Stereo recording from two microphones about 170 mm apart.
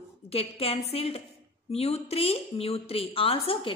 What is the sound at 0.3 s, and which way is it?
A woman's voice, 35° left (ahead or behind).